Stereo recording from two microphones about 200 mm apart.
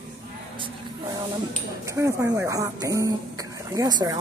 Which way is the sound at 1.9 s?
15° right (ahead or behind).